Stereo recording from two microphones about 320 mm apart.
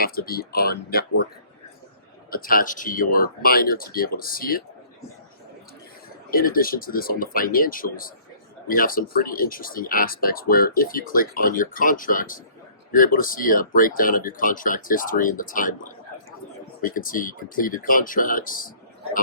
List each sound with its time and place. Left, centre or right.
0.0 s speech: left
2.3 s speech: left
6.3 s speech: left